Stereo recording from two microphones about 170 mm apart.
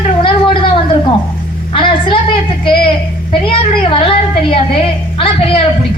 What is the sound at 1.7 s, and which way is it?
Speech, 30° left (ahead or behind).